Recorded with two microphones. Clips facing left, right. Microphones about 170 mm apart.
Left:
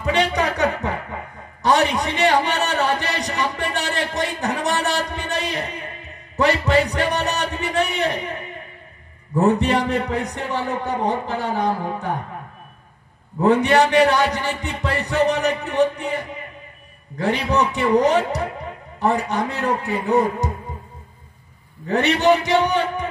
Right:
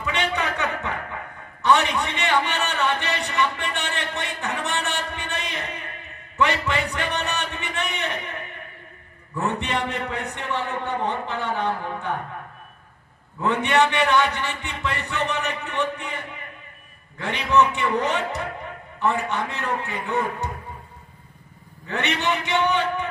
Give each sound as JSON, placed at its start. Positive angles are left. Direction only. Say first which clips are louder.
{"t": 0.0, "sound": "chuckle", "louder": "left 6 dB", "side_deg": 35}
{"t": 6.3, "sound": "music", "louder": "left 6 dB", "side_deg": 35}
{"t": 9.3, "sound": "a man's voice", "louder": "left 9 dB", "side_deg": 35}
{"t": 13.4, "sound": "a man's voice", "louder": "left 5 dB", "side_deg": 35}
{"t": 21.8, "sound": "a man's voice", "louder": "left 9 dB", "side_deg": 35}